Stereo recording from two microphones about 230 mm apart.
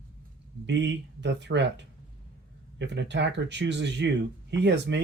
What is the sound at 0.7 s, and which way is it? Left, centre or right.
Speech, right.